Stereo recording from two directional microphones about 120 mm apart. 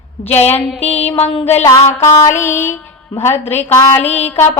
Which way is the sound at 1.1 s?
55° left (ahead or behind).